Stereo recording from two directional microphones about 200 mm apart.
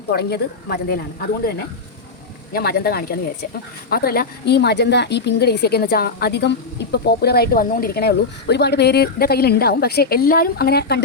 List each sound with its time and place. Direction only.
0.1 s speech: 55° left (ahead or behind)
2.5 s speech: 50° left (ahead or behind)